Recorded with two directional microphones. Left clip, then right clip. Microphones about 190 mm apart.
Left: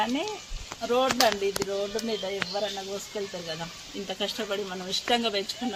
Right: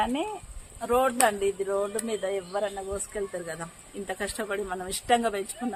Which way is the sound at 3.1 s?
10° right (ahead or behind).